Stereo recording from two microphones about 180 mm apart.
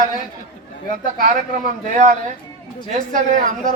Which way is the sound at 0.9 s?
50° right (ahead or behind).